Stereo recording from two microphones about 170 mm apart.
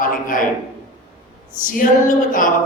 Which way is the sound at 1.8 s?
50° left (ahead or behind).